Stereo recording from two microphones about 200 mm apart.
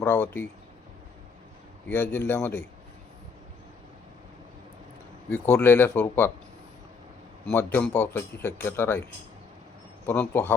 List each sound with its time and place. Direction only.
0.0 s a man's voice: 10° left (ahead or behind)
1.9 s a man's voice: 10° left (ahead or behind)
5.3 s a man's voice: 10° left (ahead or behind)
7.4 s a man's voice: 10° left (ahead or behind)
10.1 s a man's voice: 10° left (ahead or behind)